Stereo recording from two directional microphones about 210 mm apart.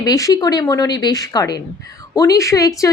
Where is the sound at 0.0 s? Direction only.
15° left (ahead or behind).